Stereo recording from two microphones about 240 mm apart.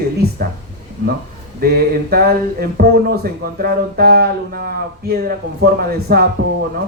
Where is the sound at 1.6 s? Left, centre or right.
Right.